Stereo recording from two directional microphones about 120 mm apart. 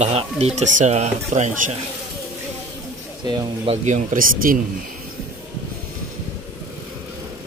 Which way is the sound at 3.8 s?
90° right.